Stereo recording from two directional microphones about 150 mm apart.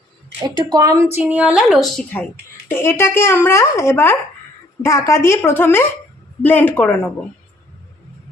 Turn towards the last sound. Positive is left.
turn(degrees=10)  # may be behind; listen again after turning